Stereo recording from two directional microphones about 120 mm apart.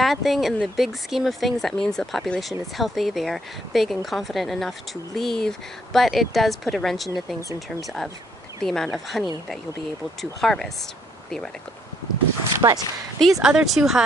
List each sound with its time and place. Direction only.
0.0 s speech: centre (ahead or behind)
10.4 s speech: 5° left (ahead or behind)
12.5 s speech: 25° right (ahead or behind)
13.2 s speech: 5° right (ahead or behind)